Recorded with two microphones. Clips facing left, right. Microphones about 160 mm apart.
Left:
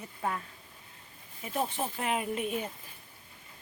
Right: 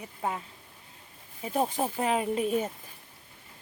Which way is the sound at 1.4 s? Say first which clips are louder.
Right 5 dB; 40° right (ahead or behind).